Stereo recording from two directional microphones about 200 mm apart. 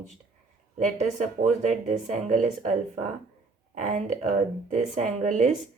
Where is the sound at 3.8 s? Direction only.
40° right (ahead or behind).